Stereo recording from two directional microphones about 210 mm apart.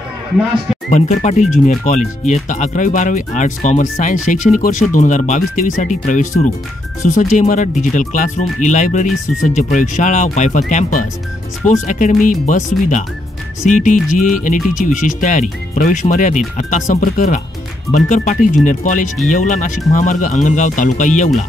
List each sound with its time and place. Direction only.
0.8 s speech: 35° left (ahead or behind)